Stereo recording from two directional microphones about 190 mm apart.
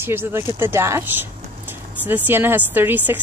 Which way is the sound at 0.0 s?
10° right (ahead or behind).